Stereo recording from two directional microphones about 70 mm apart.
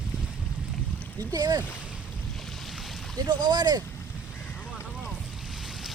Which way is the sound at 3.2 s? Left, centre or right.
Right.